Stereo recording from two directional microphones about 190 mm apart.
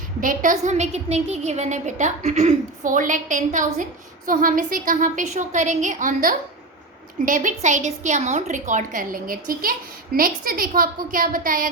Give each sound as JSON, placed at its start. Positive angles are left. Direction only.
{"t": 0.2, "sound": "a woman's voice", "side_deg": -45}